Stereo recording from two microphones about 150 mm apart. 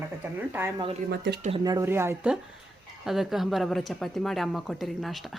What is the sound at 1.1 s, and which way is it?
Speech, 90° right.